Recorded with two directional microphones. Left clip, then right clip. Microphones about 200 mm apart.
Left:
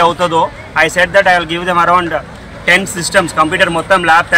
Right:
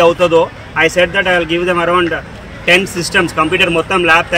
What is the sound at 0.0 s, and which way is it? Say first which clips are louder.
Speech: right 1 dB; 5° left (ahead or behind).